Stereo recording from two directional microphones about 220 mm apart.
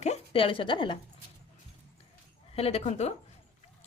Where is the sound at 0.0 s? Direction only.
25° left (ahead or behind).